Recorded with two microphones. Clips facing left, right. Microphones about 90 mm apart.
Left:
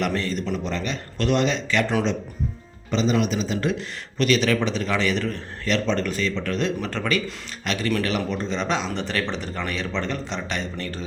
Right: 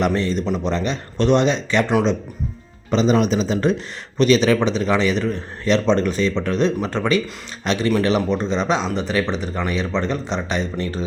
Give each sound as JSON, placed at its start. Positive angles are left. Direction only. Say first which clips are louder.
{"t": 0.0, "sound": "speech", "louder": "right 5 dB", "side_deg": -25}
{"t": 1.9, "sound": "speech", "louder": "right 8 dB", "side_deg": -15}
{"t": 2.9, "sound": "speech", "louder": "right 5 dB", "side_deg": -40}